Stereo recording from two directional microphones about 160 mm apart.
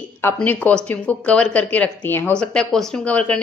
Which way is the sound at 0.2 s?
15° left (ahead or behind).